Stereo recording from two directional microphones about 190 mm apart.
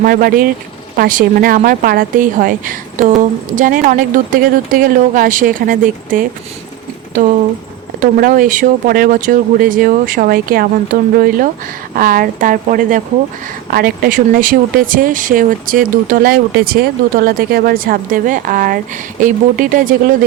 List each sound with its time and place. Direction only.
0.0 s speech: 50° right (ahead or behind)
8.0 s speech: 45° right (ahead or behind)